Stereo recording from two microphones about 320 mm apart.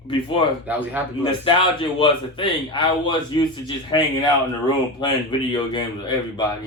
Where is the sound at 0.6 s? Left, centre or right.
Centre.